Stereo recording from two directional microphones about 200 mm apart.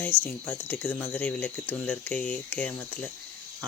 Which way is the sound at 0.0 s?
10° left (ahead or behind).